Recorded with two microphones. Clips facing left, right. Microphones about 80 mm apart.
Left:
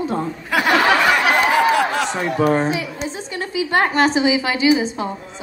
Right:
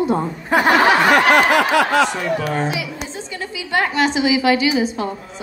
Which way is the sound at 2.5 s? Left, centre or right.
Left.